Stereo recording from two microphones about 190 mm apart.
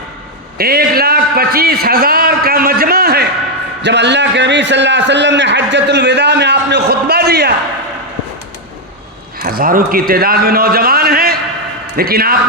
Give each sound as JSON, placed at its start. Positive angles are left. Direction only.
{"t": 0.6, "sound": "a man's voice", "side_deg": -55}
{"t": 3.8, "sound": "a man's voice", "side_deg": -65}
{"t": 9.4, "sound": "a man's voice", "side_deg": -50}